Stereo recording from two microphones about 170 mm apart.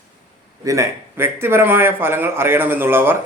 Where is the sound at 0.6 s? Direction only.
20° right (ahead or behind).